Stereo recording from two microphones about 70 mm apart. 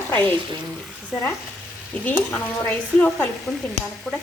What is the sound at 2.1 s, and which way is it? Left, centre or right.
Stir, left.